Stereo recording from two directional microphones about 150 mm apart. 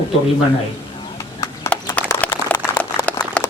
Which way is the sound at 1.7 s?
10° left (ahead or behind).